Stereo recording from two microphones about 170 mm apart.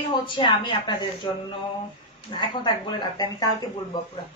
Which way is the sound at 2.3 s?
30° left (ahead or behind).